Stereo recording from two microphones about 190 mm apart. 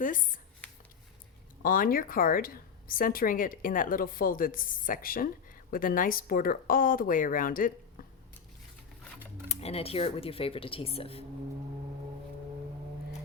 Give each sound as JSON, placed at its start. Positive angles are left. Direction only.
{"t": 0.0, "sound": "a woman's voice", "side_deg": 45}
{"t": 1.6, "sound": "a woman's voice", "side_deg": 45}
{"t": 9.5, "sound": "speech", "side_deg": 30}